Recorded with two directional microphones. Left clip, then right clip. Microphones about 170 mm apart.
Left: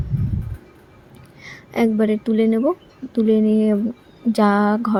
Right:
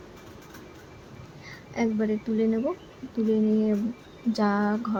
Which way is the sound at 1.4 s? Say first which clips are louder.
Left 9 dB; 40° left (ahead or behind).